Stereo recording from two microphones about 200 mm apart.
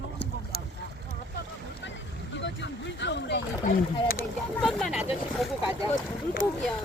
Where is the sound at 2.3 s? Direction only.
60° left (ahead or behind).